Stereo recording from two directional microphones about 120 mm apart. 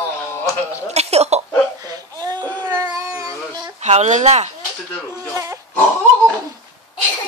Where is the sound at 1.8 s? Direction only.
30° right (ahead or behind).